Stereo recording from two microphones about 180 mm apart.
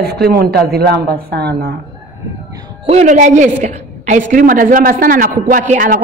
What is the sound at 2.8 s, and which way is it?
A woman's voice, 40° right (ahead or behind).